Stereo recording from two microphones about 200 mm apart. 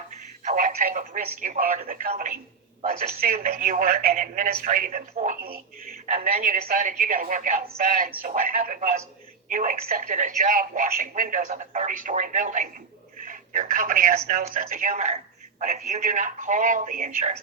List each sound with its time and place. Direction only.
0.1 s speech: 40° right (ahead or behind)